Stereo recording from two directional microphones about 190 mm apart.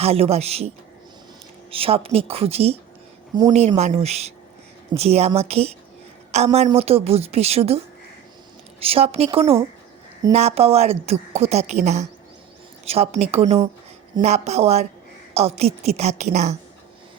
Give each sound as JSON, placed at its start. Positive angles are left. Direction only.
{"t": 0.0, "sound": "a woman's voice", "side_deg": -30}
{"t": 1.7, "sound": "a woman's voice", "side_deg": -30}
{"t": 8.8, "sound": "a woman's voice", "side_deg": -30}